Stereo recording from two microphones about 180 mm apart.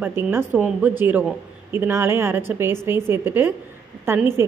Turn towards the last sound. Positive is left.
turn(degrees=-15)  # may be behind; listen again after turning